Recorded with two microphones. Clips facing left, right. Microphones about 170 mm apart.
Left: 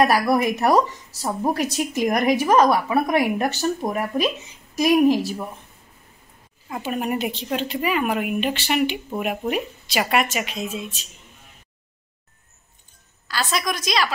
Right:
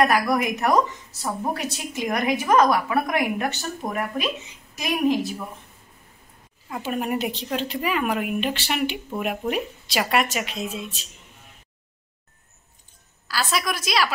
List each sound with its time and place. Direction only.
0.1 s a woman's voice: 35° left (ahead or behind)
2.4 s a woman's voice: 30° left (ahead or behind)
6.7 s a woman's voice: centre (ahead or behind)
13.3 s a woman's voice: 5° right (ahead or behind)